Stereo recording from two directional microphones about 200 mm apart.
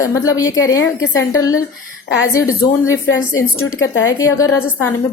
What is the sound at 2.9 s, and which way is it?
Speech, 80° left.